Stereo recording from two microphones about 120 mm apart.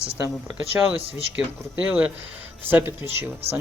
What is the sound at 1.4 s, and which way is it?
Speech, 5° right (ahead or behind).